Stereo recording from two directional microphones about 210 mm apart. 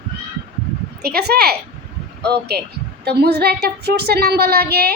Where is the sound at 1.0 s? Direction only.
50° right (ahead or behind).